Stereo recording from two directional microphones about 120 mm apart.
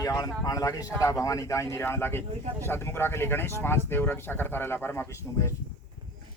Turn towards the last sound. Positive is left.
turn(degrees=20)  # may be behind; listen again after turning